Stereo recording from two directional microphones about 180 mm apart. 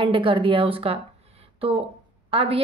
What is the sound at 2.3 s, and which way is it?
Speech, 30° right (ahead or behind).